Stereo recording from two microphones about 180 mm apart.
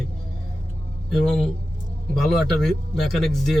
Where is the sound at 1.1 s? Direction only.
Centre (ahead or behind).